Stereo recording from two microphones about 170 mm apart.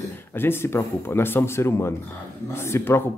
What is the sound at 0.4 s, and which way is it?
Speech, 15° left (ahead or behind).